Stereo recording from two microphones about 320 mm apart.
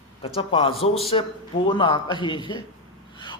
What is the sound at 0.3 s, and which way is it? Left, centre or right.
A man's voice, centre.